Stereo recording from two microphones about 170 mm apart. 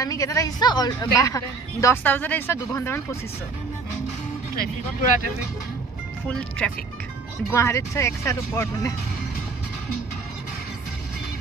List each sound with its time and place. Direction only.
0.0 s a woman's voice: 20° left (ahead or behind)
6.2 s speech: 5° left (ahead or behind)
7.4 s speech: 15° left (ahead or behind)